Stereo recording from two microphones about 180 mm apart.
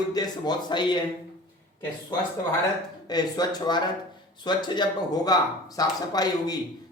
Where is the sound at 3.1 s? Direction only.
20° left (ahead or behind).